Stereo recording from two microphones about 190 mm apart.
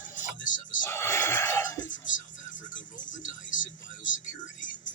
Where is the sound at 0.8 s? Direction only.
10° left (ahead or behind).